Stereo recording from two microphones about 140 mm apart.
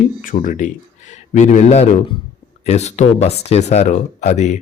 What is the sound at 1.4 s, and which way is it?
Speech, 55° left (ahead or behind).